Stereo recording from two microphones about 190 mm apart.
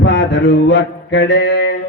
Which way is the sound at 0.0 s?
60° left (ahead or behind).